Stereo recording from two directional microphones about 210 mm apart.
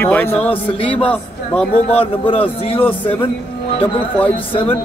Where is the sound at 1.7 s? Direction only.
30° left (ahead or behind).